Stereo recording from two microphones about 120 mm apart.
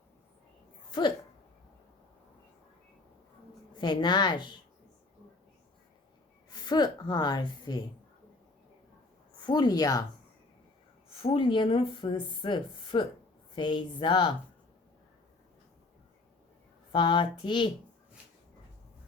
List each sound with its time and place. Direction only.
0.9 s a sound: 40° left (ahead or behind)
3.8 s a woman's voice: 40° left (ahead or behind)
6.5 s a woman's voice: 35° left (ahead or behind)
9.4 s a woman's voice: 35° left (ahead or behind)
11.1 s speech: 50° left (ahead or behind)
16.9 s a woman's voice: 40° left (ahead or behind)